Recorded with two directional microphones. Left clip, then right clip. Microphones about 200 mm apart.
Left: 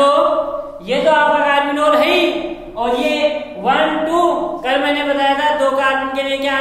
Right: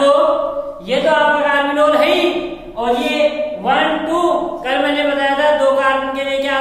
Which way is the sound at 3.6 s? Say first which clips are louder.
Left 1 dB; 15° left (ahead or behind).